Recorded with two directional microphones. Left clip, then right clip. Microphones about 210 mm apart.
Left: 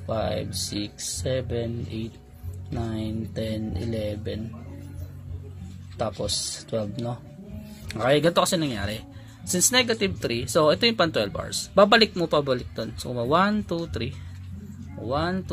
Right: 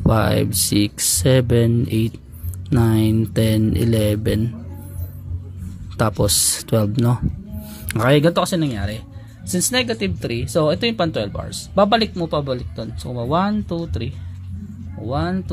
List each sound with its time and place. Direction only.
0.1 s speech: 30° right (ahead or behind)
5.9 s speech: 30° right (ahead or behind)
7.9 s speech: 20° right (ahead or behind); by 15.5 s 5° right (ahead or behind)